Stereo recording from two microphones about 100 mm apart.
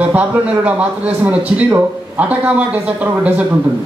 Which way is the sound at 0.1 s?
15° right (ahead or behind).